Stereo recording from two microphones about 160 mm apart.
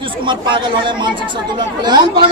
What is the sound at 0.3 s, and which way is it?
Speech, 30° right (ahead or behind).